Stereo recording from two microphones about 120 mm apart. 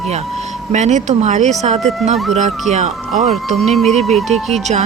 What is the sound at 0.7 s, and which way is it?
Speech, 75° right (ahead or behind).